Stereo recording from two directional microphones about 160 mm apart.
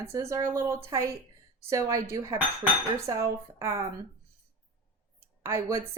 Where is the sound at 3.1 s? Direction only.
20° right (ahead or behind).